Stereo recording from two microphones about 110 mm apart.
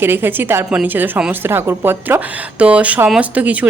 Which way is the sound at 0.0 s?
20° right (ahead or behind).